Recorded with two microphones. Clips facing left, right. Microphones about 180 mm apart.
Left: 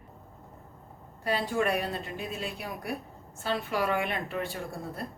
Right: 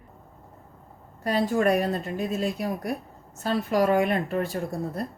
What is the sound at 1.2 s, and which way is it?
A woman's voice, 45° right (ahead or behind).